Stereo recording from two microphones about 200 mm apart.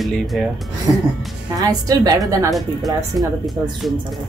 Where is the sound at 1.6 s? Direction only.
20° right (ahead or behind).